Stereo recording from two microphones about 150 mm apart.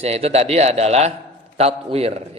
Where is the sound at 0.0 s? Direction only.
45° right (ahead or behind).